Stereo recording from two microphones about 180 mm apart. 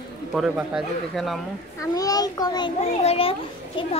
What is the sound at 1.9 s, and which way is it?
Speech, 20° left (ahead or behind).